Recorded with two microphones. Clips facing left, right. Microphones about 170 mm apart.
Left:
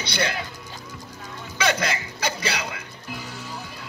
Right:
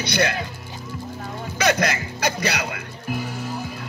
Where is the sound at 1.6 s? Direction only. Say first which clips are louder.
Right 3 dB; 50° right (ahead or behind).